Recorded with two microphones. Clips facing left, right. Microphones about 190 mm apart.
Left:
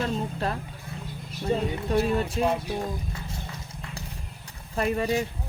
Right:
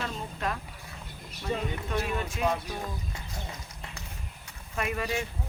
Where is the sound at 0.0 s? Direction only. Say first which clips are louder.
Left 6 dB; 35° left (ahead or behind).